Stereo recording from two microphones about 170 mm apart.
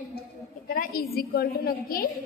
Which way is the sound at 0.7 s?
60° left (ahead or behind).